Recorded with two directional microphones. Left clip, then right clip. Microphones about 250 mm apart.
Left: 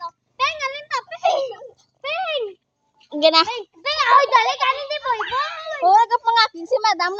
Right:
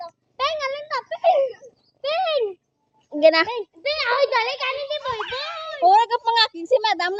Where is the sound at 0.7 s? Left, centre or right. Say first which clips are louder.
Even; centre.